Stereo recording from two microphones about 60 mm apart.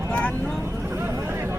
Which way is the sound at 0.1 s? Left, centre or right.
Left.